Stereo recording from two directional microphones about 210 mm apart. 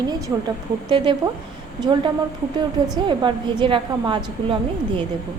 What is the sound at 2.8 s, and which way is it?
A woman's voice, 20° right (ahead or behind).